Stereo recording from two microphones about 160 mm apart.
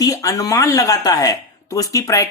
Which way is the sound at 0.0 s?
20° left (ahead or behind).